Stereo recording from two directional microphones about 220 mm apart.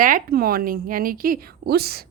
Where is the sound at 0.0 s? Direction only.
40° right (ahead or behind).